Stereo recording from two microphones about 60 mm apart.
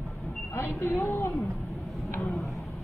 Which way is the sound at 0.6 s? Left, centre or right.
Left.